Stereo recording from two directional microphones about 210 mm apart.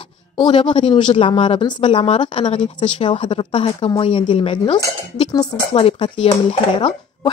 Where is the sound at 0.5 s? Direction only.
25° left (ahead or behind).